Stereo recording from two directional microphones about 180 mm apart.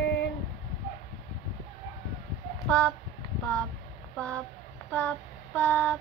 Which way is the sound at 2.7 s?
5° left (ahead or behind).